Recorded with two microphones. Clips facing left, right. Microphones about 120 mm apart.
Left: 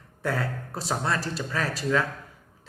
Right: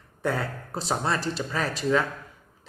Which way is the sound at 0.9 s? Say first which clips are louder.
Right 1 dB; 25° right (ahead or behind).